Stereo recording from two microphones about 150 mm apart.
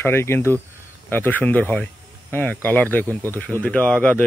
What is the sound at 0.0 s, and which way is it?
Speech, 15° left (ahead or behind).